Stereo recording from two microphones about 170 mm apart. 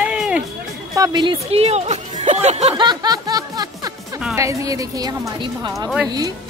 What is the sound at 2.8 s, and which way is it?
Snicker, 25° right (ahead or behind).